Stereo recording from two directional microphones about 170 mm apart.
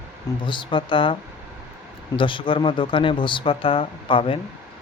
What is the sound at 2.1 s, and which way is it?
Speech, 30° left (ahead or behind).